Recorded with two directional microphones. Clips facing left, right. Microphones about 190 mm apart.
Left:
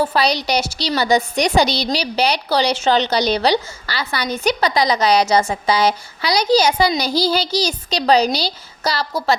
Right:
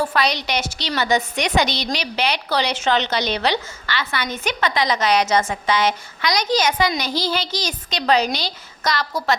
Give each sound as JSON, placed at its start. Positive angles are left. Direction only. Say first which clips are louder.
{"t": 0.0, "sound": "a woman's voice", "louder": "left 3 dB", "side_deg": 30}